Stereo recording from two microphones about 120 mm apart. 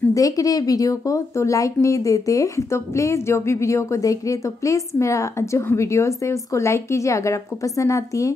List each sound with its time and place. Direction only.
0.1 s speech: 30° left (ahead or behind)